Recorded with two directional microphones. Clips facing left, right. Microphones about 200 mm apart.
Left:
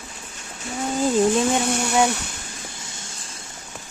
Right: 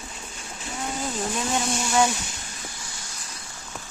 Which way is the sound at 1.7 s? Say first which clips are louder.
Left 3 dB; 60° left (ahead or behind).